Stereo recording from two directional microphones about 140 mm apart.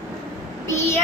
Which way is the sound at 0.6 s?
20° left (ahead or behind).